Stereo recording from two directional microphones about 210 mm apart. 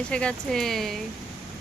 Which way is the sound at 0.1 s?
5° left (ahead or behind).